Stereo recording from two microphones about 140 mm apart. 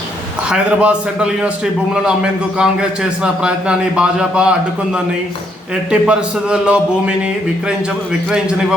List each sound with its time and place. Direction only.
0.5 s a man's voice: 5° right (ahead or behind)
8.3 s a man's voice: 5° right (ahead or behind)